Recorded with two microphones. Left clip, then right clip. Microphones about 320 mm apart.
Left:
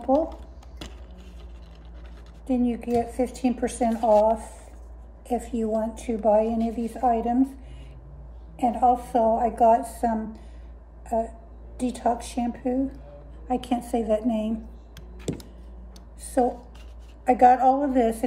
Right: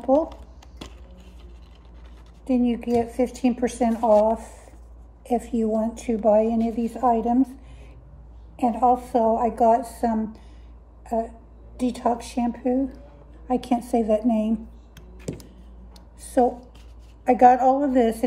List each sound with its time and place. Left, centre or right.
0.0 s speech: right
2.5 s a woman's voice: right
5.5 s a woman's voice: right
8.5 s a woman's voice: right
11.7 s a woman's voice: right
16.3 s a woman's voice: right